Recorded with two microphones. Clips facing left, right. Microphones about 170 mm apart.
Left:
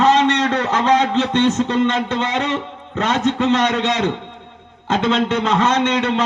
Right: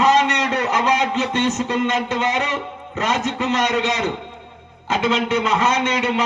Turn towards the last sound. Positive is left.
turn(degrees=-5)  # may be behind; listen again after turning